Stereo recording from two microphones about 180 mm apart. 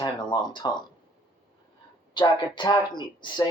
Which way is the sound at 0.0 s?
25° left (ahead or behind).